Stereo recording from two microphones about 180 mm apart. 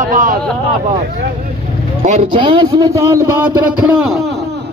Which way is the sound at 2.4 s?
25° right (ahead or behind).